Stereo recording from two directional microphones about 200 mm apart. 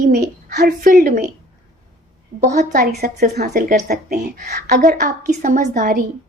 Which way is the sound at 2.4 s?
50° right (ahead or behind).